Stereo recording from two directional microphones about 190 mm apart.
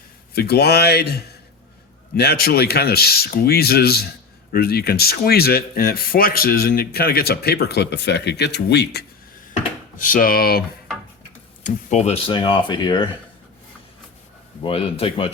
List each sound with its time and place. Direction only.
0.3 s speech: 55° left (ahead or behind)
10.0 s speech: 45° left (ahead or behind)
11.6 s speech: 35° left (ahead or behind)
14.6 s speech: 30° left (ahead or behind)